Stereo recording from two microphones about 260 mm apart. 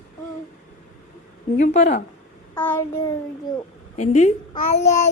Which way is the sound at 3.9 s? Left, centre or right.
Left.